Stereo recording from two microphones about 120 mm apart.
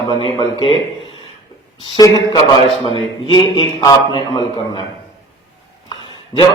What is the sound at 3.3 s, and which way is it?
Speech, 40° left (ahead or behind).